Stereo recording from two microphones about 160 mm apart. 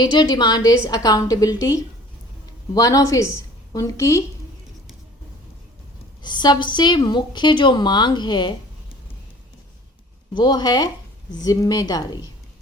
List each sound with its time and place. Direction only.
0.0 s a woman's voice: 25° left (ahead or behind)
6.2 s a woman's voice: 30° left (ahead or behind)
10.3 s a woman's voice: 25° left (ahead or behind)